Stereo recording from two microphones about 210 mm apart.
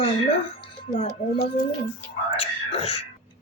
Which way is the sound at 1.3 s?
40° left (ahead or behind).